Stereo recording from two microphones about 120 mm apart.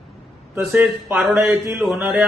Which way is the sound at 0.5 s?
20° right (ahead or behind).